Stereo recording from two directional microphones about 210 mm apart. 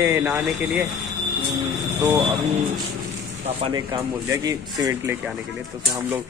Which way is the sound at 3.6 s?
20° right (ahead or behind).